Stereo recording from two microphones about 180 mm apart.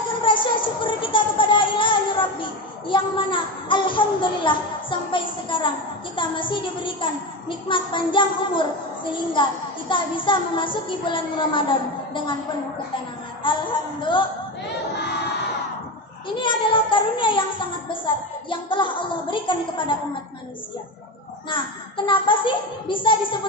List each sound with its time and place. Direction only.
0.3 s music: 30° left (ahead or behind)
6.1 s a woman's voice: 25° left (ahead or behind)
14.0 s a woman's voice: 25° left (ahead or behind)
16.4 s a woman's voice: 25° left (ahead or behind)
21.5 s a woman's voice: 25° left (ahead or behind)